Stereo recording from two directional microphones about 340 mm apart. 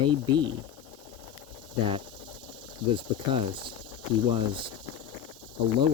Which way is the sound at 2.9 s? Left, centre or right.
Centre.